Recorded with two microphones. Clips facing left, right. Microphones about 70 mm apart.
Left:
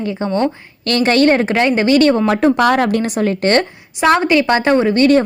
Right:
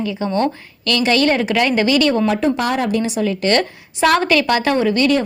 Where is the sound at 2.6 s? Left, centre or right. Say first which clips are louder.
Left 5 dB; left.